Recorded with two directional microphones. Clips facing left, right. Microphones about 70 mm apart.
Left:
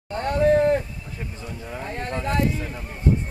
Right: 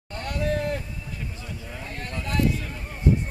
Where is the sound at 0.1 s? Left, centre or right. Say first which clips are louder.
Left 9 dB; left.